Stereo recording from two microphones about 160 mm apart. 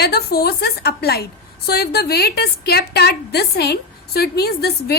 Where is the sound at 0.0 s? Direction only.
75° left (ahead or behind).